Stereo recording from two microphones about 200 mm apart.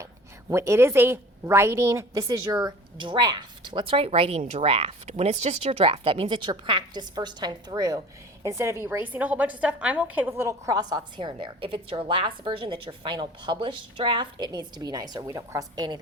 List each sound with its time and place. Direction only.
0.5 s a woman's voice: 15° right (ahead or behind)